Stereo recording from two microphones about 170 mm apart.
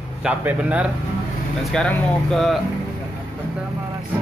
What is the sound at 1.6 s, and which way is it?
Speech, centre (ahead or behind).